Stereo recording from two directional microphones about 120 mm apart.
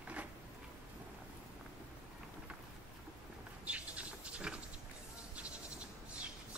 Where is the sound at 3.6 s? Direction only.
10° right (ahead or behind).